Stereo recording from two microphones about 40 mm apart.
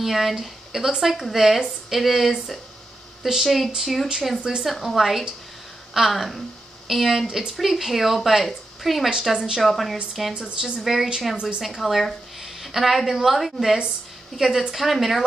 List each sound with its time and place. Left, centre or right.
0.0 s speech: centre
4.4 s speech: centre
4.6 s speech: centre
7.5 s speech: centre
10.3 s speech: centre
10.8 s a woman's voice: centre